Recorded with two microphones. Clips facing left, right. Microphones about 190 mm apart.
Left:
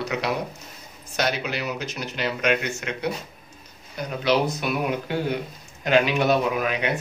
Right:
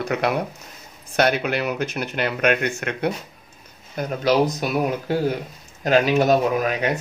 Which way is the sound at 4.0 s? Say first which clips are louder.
Right 3 dB; 40° right (ahead or behind).